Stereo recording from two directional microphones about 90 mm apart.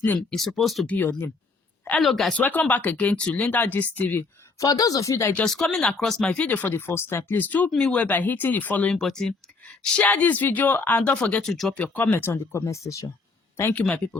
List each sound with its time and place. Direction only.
0.2 s speech: 5° left (ahead or behind)
0.9 s speech: 20° left (ahead or behind)
2.0 s speech: centre (ahead or behind)
2.4 s speech: 20° left (ahead or behind)
4.6 s speech: 45° left (ahead or behind)
5.5 s speech: 5° left (ahead or behind)
9.0 s speech: 5° left (ahead or behind); by 13.1 s 35° left (ahead or behind)
13.6 s speech: 25° left (ahead or behind)
13.8 s speech: 10° left (ahead or behind)